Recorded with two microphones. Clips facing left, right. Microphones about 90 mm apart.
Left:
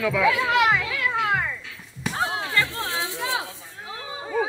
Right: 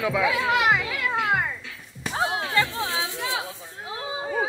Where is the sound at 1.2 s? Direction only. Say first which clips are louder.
Even; 10° right (ahead or behind).